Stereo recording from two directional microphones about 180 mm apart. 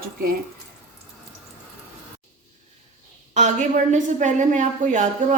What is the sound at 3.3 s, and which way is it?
A woman's voice, 45° right (ahead or behind).